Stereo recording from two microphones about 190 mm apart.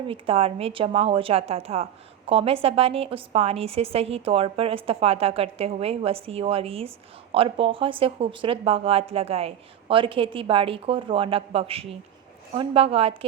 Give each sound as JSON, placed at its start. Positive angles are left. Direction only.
{"t": 0.1, "sound": "a woman's voice", "side_deg": -30}